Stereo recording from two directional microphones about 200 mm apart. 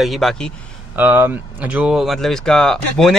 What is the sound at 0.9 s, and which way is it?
Speech, 10° right (ahead or behind).